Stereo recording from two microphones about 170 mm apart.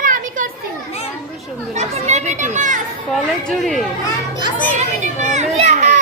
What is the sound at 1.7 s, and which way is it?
A child's voice, 40° right (ahead or behind).